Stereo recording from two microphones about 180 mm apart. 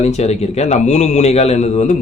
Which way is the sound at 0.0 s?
35° left (ahead or behind).